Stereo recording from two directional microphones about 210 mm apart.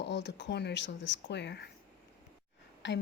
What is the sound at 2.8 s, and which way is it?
Speech, 55° left (ahead or behind).